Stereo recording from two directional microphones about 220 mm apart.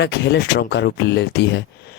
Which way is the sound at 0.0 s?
50° left (ahead or behind).